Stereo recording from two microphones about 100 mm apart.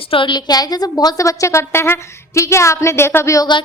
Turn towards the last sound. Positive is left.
turn(degrees=30)  # may be behind; listen again after turning